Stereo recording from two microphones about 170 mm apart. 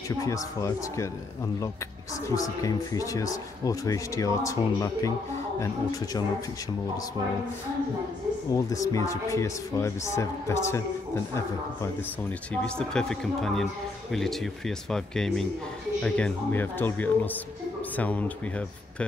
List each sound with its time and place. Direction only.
0.2 s speech: 20° left (ahead or behind)
2.2 s speech: 20° left (ahead or behind)
8.5 s speech: 20° left (ahead or behind)
12.6 s speech: 5° left (ahead or behind)